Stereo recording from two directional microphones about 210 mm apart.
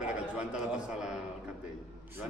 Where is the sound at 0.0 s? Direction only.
5° right (ahead or behind).